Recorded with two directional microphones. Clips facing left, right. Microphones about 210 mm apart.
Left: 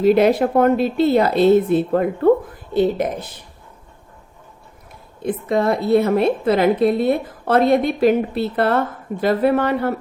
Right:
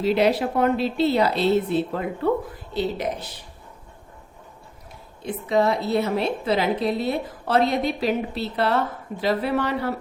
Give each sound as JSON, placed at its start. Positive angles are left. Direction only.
{"t": 0.0, "sound": "a woman's voice", "side_deg": 50}
{"t": 5.2, "sound": "a woman's voice", "side_deg": 50}